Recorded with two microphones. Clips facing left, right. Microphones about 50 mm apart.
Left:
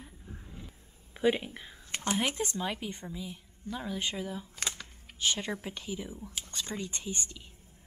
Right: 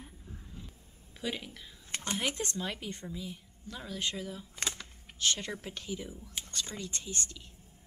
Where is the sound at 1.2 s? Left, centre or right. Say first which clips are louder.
Left 10 dB; left.